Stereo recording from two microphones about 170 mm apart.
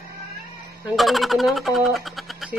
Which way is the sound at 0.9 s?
Centre (ahead or behind).